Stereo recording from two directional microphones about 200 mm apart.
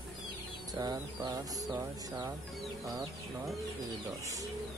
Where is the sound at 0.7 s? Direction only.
20° right (ahead or behind).